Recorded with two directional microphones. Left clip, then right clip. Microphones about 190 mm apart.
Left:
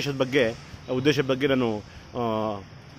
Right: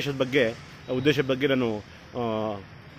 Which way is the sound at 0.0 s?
5° left (ahead or behind).